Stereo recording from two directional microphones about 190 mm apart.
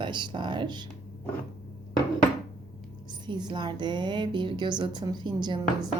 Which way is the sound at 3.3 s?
25° right (ahead or behind).